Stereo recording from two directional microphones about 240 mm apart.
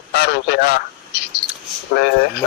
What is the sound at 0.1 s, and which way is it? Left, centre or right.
Radio, left.